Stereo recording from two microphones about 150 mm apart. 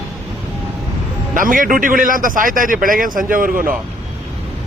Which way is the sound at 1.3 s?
65° right (ahead or behind).